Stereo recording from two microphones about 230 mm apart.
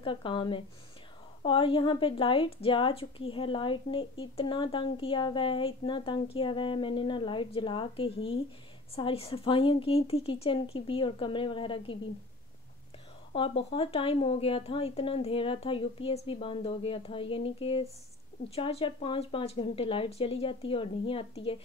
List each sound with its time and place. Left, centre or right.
0.0 s a woman's voice: left
13.3 s a woman's voice: left